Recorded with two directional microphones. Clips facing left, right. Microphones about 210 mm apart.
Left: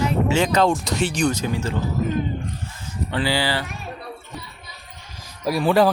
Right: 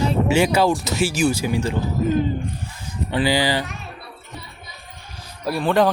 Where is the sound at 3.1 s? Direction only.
15° right (ahead or behind).